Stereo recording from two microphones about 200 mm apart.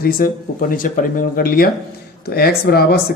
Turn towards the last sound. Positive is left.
turn(degrees=50)  # may be behind; listen again after turning